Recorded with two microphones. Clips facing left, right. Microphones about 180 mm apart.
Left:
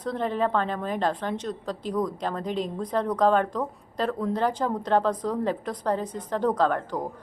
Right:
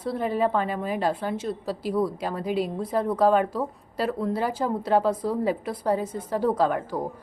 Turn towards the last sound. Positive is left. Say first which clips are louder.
# right 1 dB
turn(degrees=-10)  # may be behind; listen again after turning